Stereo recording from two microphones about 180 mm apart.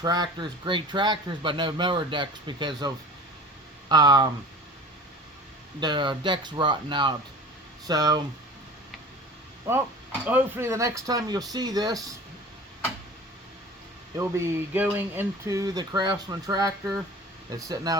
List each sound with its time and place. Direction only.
0.0 s a man's voice: 25° right (ahead or behind)
5.8 s a man's voice: 25° right (ahead or behind)
10.2 s a man's voice: 10° right (ahead or behind)
14.2 s a man's voice: 15° right (ahead or behind)